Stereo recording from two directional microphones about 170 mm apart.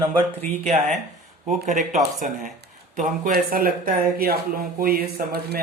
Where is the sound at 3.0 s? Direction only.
55° right (ahead or behind).